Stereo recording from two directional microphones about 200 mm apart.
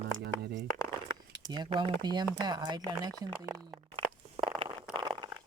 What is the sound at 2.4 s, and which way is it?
Speech, 20° right (ahead or behind).